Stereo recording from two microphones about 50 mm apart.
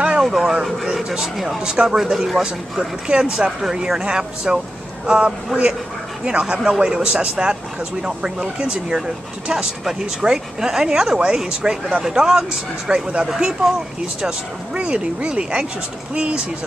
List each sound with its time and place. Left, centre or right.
0.2 s speech: centre
3.1 s speech: centre